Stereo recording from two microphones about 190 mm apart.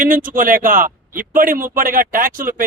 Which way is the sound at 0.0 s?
45° right (ahead or behind).